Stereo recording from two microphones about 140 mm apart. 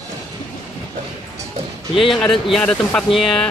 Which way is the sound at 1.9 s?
Centre (ahead or behind).